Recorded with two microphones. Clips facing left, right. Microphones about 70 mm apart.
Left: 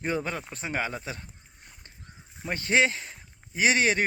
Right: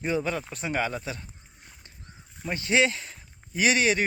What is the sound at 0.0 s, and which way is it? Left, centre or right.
A man's voice, left.